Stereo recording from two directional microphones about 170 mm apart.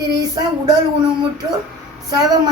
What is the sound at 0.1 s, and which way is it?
Speech, 20° right (ahead or behind).